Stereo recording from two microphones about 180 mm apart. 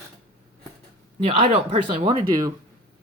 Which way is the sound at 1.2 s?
35° right (ahead or behind).